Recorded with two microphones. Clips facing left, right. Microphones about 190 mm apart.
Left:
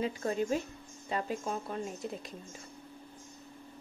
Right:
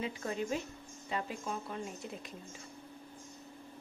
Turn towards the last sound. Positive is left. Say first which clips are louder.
# left 4 dB
turn(degrees=40)  # may be behind; listen again after turning